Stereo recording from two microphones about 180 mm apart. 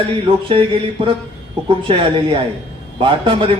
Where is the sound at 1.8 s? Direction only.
30° right (ahead or behind).